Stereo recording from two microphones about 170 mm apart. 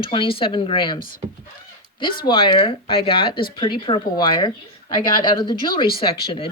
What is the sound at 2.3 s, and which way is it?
Speech, 30° left (ahead or behind).